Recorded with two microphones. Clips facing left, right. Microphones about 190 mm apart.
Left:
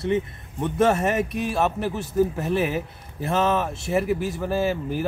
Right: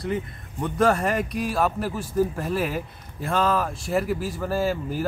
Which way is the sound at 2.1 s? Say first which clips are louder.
Left 2 dB; 5° left (ahead or behind).